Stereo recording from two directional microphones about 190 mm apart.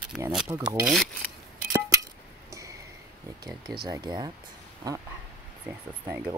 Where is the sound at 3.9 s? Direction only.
20° right (ahead or behind).